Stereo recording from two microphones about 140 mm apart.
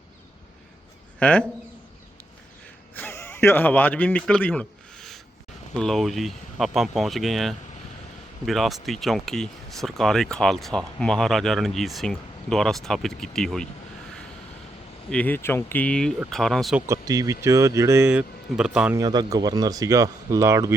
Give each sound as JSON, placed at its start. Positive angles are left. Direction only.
{"t": 1.2, "sound": "speech", "side_deg": 10}
{"t": 2.9, "sound": "a sound", "side_deg": 15}
{"t": 5.7, "sound": "speech", "side_deg": 5}
{"t": 15.1, "sound": "speech", "side_deg": 10}
{"t": 16.8, "sound": "speech", "side_deg": -25}
{"t": 18.1, "sound": "speech", "side_deg": -5}
{"t": 18.9, "sound": "speech", "side_deg": -25}